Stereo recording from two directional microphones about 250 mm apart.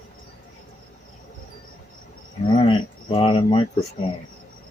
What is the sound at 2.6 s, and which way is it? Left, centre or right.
Cricket, left.